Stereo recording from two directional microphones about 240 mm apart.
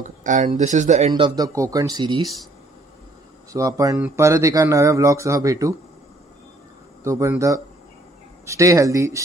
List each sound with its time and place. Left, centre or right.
0.2 s speech: right
3.5 s speech: centre
7.0 s speech: centre